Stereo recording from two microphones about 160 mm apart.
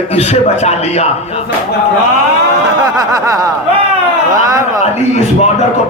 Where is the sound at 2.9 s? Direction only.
20° right (ahead or behind).